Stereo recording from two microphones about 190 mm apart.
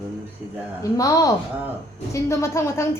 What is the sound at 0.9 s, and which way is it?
A woman's voice, 20° left (ahead or behind).